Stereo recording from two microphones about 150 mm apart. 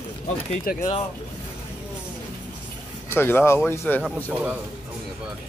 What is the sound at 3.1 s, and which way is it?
Speech, 15° left (ahead or behind).